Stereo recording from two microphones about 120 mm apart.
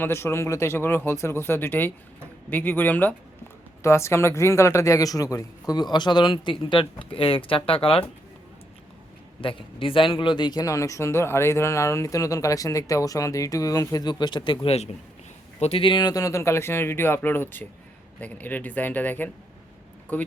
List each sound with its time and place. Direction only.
0.0 s speech: 20° left (ahead or behind); by 8.0 s 50° left (ahead or behind)
9.4 s speech: 45° left (ahead or behind); by 19.3 s 15° left (ahead or behind)